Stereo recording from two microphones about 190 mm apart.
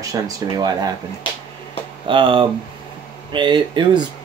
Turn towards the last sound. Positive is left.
turn(degrees=-25)  # may be behind; listen again after turning